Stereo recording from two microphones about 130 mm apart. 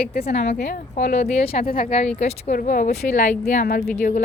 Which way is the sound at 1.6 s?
90° left.